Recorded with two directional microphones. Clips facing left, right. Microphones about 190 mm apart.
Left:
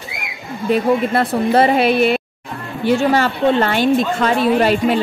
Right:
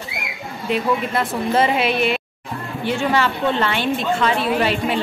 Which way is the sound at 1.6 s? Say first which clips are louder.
Left 5 dB; 40° left (ahead or behind).